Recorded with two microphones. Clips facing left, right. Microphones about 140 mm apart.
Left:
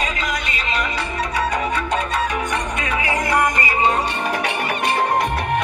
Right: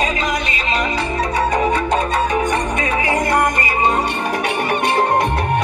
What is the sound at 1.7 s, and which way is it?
Music, 40° right (ahead or behind).